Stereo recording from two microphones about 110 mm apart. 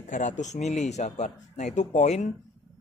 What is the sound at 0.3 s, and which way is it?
Speech, 90° left.